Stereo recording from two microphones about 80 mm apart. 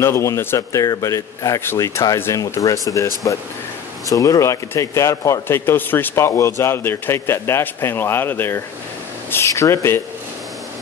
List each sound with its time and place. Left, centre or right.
0.0 s speech: left
4.1 s a man's voice: left